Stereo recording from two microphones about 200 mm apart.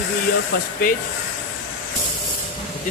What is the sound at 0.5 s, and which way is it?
Speech, 45° left (ahead or behind).